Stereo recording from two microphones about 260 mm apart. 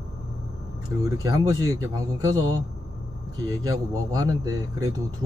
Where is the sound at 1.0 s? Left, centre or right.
Centre.